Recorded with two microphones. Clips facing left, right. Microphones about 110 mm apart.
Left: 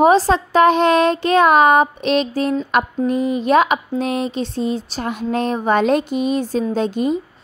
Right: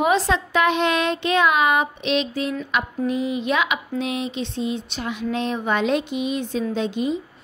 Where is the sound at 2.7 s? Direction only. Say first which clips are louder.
Left 4 dB; 45° left (ahead or behind).